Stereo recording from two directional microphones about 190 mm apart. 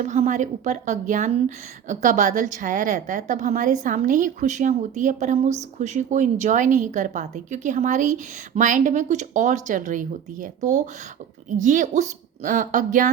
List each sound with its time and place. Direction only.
0.0 s a woman's voice: 40° right (ahead or behind)